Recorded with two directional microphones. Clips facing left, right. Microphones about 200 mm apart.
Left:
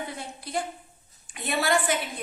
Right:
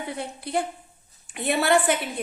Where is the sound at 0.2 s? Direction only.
60° right (ahead or behind).